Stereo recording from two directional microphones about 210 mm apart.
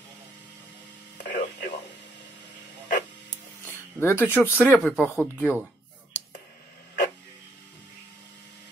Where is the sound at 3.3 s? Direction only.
10° left (ahead or behind).